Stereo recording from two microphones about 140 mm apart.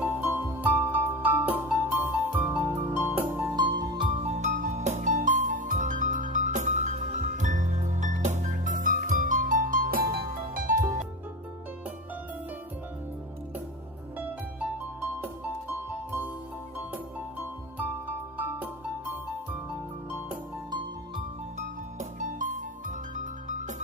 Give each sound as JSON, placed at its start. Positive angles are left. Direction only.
{"t": 0.0, "sound": "music", "side_deg": -15}
{"t": 3.5, "sound": "music", "side_deg": -30}
{"t": 18.0, "sound": "music", "side_deg": -10}
{"t": 22.2, "sound": "music", "side_deg": -65}